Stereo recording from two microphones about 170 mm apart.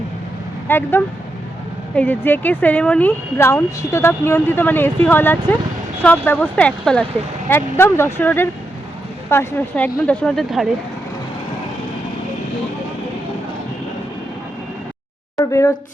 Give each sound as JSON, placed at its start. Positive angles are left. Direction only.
{"t": 0.7, "sound": "speech", "side_deg": 10}
{"t": 15.4, "sound": "speech", "side_deg": 15}